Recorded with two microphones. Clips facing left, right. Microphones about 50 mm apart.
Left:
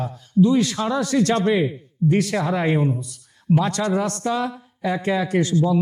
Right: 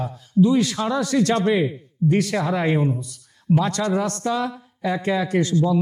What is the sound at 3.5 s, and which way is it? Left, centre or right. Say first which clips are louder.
Speech: even; centre.